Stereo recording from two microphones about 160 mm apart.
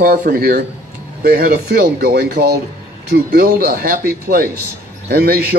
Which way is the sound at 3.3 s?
65° right (ahead or behind).